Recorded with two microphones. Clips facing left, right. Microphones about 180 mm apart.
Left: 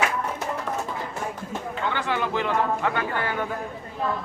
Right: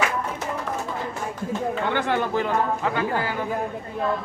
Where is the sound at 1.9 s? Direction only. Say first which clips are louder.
Right 1 dB; 50° right (ahead or behind).